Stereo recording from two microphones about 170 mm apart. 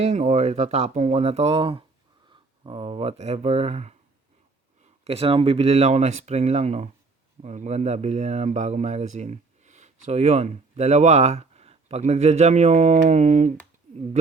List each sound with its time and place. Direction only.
0.0 s speech: 40° right (ahead or behind)